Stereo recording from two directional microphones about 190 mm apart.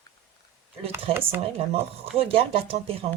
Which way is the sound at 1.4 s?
30° right (ahead or behind).